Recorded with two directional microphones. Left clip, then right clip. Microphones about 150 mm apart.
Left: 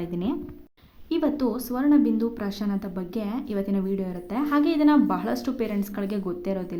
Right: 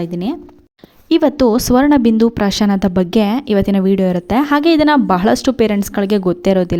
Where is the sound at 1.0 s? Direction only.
60° right (ahead or behind).